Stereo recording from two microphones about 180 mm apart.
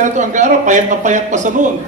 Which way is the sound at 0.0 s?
45° right (ahead or behind).